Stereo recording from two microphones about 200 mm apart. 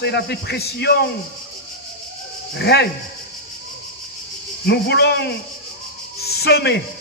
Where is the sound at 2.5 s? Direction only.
55° left (ahead or behind).